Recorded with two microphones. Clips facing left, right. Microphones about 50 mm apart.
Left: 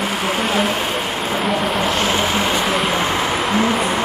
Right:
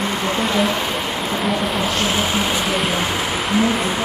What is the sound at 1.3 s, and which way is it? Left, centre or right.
Speech, centre.